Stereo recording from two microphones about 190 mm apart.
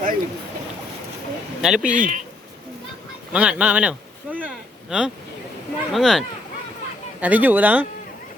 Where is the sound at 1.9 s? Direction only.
45° right (ahead or behind).